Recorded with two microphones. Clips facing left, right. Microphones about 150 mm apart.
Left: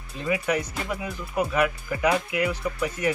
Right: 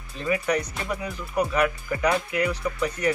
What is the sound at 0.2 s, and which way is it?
Speech, 10° left (ahead or behind).